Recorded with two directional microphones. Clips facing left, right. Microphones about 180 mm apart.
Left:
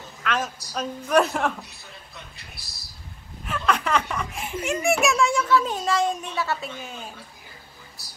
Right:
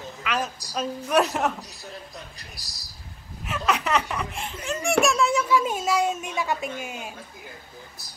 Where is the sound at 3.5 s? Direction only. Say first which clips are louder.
Left 1 dB; 5° right (ahead or behind).